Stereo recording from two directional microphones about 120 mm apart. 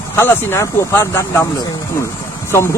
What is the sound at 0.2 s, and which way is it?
Speech, 20° left (ahead or behind).